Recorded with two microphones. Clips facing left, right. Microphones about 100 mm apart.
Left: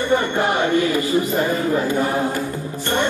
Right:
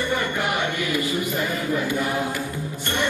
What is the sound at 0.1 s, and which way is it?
Speech, 30° left (ahead or behind).